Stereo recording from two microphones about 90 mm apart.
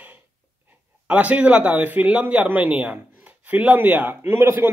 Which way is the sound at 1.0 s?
15° right (ahead or behind).